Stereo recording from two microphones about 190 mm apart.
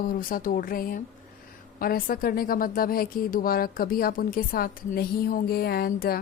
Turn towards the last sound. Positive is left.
turn(degrees=55)  # may be behind; listen again after turning